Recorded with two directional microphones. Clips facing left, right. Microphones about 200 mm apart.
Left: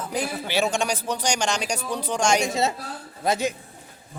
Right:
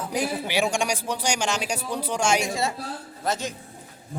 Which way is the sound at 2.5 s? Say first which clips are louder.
Left 3 dB; 25° left (ahead or behind).